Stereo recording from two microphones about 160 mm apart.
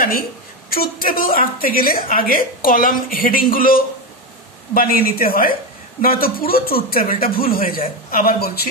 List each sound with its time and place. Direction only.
0.7 s speech: 65° left (ahead or behind)